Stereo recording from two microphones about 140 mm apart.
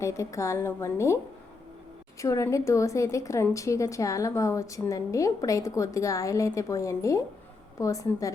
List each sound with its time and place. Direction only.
0.0 s a woman's voice: 20° left (ahead or behind)
2.2 s a woman's voice: 20° left (ahead or behind)